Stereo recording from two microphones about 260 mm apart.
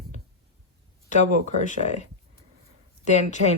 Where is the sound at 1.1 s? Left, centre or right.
Left.